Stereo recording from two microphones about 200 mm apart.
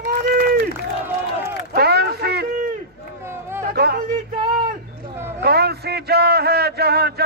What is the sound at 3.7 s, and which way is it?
Speech, 50° right (ahead or behind).